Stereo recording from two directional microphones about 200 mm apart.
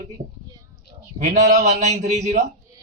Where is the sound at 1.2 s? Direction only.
35° right (ahead or behind).